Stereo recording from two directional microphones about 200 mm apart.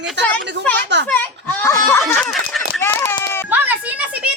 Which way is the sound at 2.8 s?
15° left (ahead or behind).